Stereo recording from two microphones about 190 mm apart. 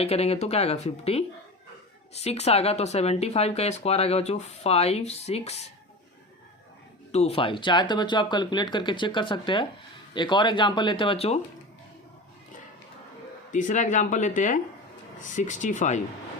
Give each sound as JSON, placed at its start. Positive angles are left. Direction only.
{"t": 0.0, "sound": "speech", "side_deg": 35}
{"t": 7.1, "sound": "speech", "side_deg": 35}
{"t": 13.5, "sound": "speech", "side_deg": 40}